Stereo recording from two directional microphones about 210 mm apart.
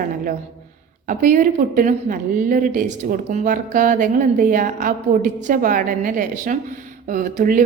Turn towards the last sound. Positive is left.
turn(degrees=-40)  # may be behind; listen again after turning